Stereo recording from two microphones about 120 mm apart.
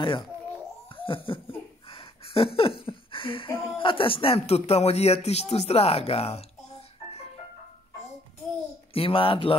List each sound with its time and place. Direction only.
0.9 s laughter: 45° left (ahead or behind)
1.9 s a sound: 50° left (ahead or behind)
3.7 s speech: 45° left (ahead or behind)
8.9 s speech: 50° left (ahead or behind)